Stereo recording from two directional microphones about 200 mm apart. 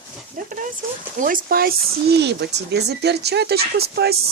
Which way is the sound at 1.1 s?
45° right (ahead or behind).